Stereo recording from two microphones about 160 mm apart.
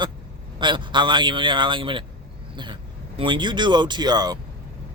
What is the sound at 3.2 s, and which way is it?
Speech, 30° right (ahead or behind).